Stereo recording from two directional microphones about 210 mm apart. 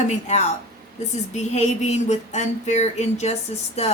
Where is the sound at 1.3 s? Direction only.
35° left (ahead or behind).